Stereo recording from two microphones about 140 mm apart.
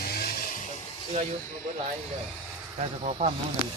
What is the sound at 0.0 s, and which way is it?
Vehicle, 90° left.